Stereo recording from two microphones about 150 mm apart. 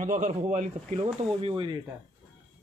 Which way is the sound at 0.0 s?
55° right (ahead or behind).